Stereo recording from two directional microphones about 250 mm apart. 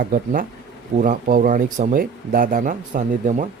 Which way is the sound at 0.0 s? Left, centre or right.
Right.